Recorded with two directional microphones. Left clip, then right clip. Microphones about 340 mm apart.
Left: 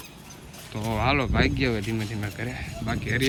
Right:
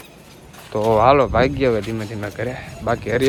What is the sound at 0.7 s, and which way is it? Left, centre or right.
Speech, centre.